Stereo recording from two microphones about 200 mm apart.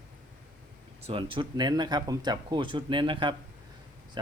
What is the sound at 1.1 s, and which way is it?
Speech, 25° right (ahead or behind).